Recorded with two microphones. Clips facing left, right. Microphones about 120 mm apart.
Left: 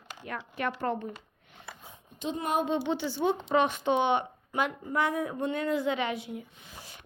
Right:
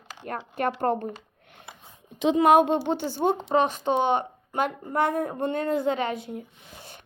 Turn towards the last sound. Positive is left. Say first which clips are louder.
# right 3 dB
turn(degrees=-45)  # may be behind; listen again after turning